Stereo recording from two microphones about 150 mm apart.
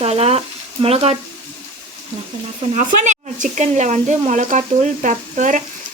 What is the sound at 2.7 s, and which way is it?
Speech, 55° right (ahead or behind).